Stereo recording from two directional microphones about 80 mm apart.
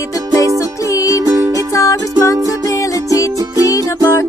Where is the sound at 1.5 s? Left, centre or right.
Left.